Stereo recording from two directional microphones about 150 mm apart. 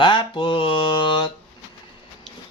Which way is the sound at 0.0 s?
30° left (ahead or behind).